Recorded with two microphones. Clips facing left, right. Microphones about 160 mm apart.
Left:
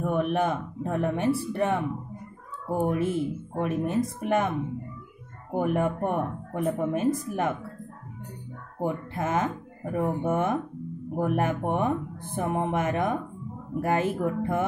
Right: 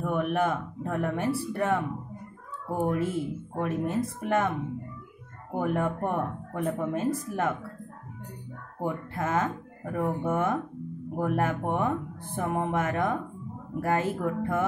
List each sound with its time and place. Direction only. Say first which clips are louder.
0.0 s speech: left 1 dB; 20° left (ahead or behind)
2.8 s speech: left 2 dB; 20° left (ahead or behind)
5.5 s speech: left 2 dB; 20° left (ahead or behind)
8.8 s speech: left 2 dB; 20° left (ahead or behind)